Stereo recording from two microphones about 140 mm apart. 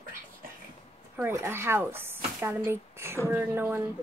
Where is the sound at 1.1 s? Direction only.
15° right (ahead or behind).